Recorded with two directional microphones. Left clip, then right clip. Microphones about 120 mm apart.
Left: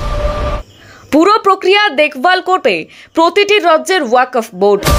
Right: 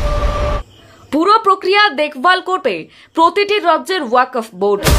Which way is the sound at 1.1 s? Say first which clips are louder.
Left 2 dB; 35° left (ahead or behind).